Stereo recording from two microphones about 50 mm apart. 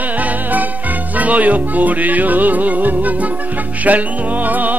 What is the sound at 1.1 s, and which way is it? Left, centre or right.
Music, right.